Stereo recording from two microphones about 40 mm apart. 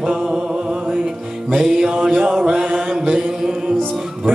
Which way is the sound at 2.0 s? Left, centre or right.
Centre.